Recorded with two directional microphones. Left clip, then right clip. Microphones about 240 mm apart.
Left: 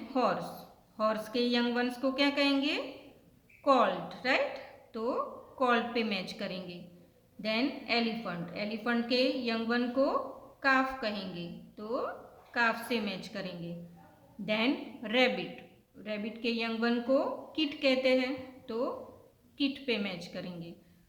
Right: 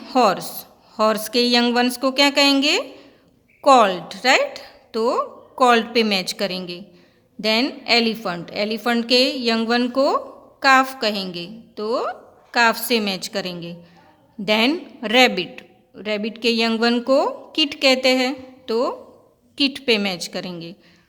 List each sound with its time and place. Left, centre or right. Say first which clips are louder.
0.1 s speech: right 13 dB; right
0.3 s a woman's voice: right 7 dB; centre
0.9 s a woman's voice: right 12 dB; right